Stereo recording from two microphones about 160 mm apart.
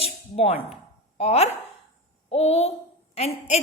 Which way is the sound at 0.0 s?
40° left (ahead or behind).